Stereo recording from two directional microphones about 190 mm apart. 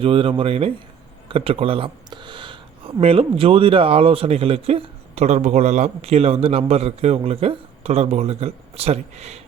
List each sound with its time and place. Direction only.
0.0 s speech: 30° right (ahead or behind)